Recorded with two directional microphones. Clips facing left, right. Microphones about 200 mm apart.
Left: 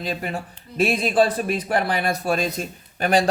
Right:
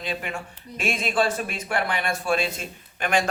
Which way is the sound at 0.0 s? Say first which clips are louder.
Left 3 dB; 40° left (ahead or behind).